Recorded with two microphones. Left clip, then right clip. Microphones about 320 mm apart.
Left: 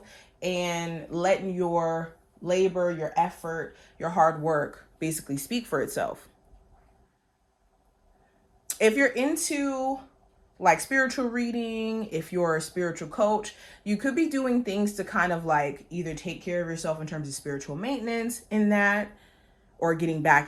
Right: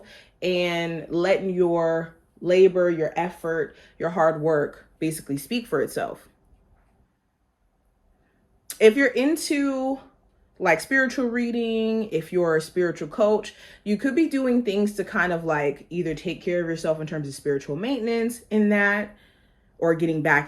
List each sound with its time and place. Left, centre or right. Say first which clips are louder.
0.2 s speech: right 5 dB; centre; by 6.3 s left
8.6 s speech: right 5 dB; left
9.3 s speech: right 4 dB; centre
14.0 s speech: right 3 dB; left
15.4 s speech: right 1 dB; centre
17.9 s speech: right 6 dB; left